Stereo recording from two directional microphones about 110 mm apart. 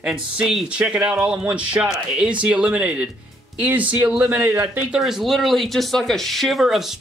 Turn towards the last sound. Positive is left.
turn(degrees=0)  # may be behind; listen again after turning